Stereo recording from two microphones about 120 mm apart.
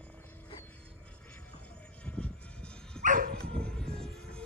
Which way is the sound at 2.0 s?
10° left (ahead or behind).